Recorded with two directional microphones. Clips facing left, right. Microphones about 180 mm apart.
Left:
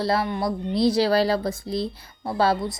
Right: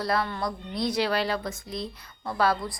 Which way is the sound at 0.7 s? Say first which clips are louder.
Left 7 dB; 30° left (ahead or behind).